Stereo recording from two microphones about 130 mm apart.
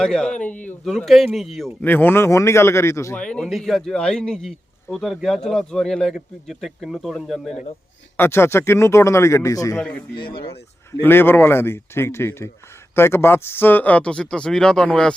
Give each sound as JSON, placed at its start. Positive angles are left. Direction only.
{"t": 0.0, "sound": "speech", "side_deg": 5}
{"t": 1.8, "sound": "speech", "side_deg": 15}
{"t": 3.2, "sound": "speech", "side_deg": 10}
{"t": 8.1, "sound": "speech", "side_deg": 20}
{"t": 10.2, "sound": "speech", "side_deg": 40}
{"t": 11.0, "sound": "speech", "side_deg": 15}